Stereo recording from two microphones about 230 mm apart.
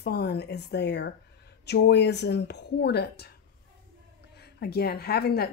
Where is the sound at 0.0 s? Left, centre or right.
Left.